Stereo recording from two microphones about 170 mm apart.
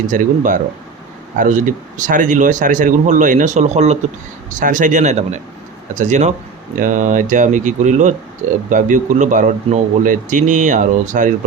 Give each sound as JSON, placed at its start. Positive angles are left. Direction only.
{"t": 0.1, "sound": "speech", "side_deg": -50}